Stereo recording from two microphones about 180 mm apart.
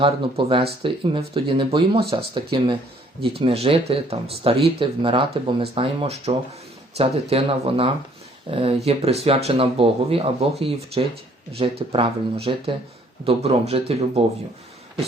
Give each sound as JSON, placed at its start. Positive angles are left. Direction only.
{"t": 0.0, "sound": "speech", "side_deg": -30}
{"t": 11.9, "sound": "speech", "side_deg": -30}